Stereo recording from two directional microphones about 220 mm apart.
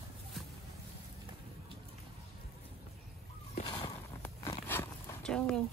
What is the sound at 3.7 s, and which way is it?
Zipper, 15° left (ahead or behind).